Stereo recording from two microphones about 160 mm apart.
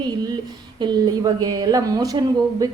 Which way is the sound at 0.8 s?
25° right (ahead or behind).